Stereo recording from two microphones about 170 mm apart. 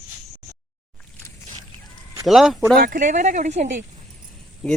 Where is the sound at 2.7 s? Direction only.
55° right (ahead or behind).